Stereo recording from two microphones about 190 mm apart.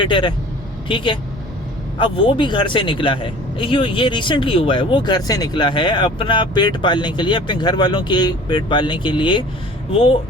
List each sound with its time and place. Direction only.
0.0 s a man's voice: 25° left (ahead or behind)